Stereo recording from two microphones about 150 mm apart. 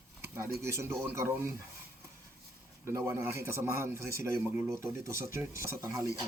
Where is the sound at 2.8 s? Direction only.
20° right (ahead or behind).